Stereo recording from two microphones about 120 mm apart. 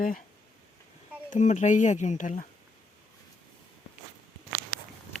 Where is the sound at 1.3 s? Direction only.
85° left.